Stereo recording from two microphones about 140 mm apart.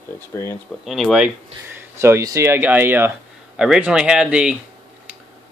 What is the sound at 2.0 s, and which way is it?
Speech, 20° right (ahead or behind).